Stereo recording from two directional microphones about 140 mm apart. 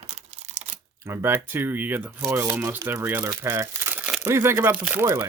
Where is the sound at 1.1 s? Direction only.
15° right (ahead or behind).